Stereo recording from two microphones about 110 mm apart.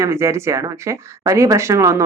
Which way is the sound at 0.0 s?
25° right (ahead or behind).